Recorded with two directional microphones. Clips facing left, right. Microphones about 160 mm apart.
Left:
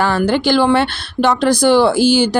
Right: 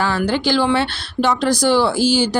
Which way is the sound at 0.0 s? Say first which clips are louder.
Left 4 dB; 55° left (ahead or behind).